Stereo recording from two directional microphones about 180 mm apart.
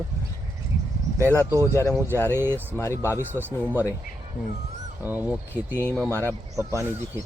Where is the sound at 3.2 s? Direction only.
10° right (ahead or behind).